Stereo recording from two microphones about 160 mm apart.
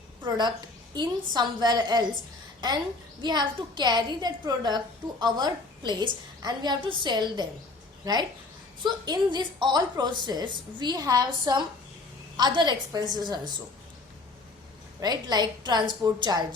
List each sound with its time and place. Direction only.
0.3 s a woman's voice: 25° right (ahead or behind)
3.2 s a woman's voice: 25° right (ahead or behind)
15.0 s a woman's voice: 25° right (ahead or behind)